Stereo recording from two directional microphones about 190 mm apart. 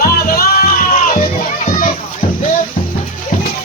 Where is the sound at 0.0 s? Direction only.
50° left (ahead or behind).